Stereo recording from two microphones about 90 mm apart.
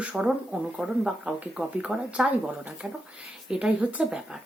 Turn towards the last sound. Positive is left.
turn(degrees=-10)  # may be behind; listen again after turning